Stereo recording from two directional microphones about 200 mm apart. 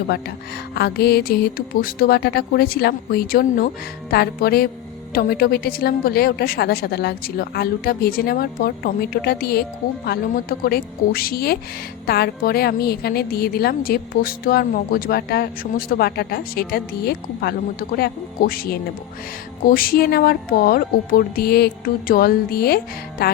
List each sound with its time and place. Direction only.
0.7 s a woman's voice: 55° left (ahead or behind)